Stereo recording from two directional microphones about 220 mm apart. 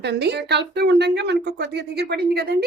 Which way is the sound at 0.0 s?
50° right (ahead or behind).